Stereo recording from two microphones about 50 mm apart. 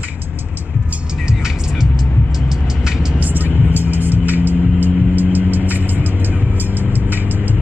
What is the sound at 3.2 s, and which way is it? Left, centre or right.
Music, right.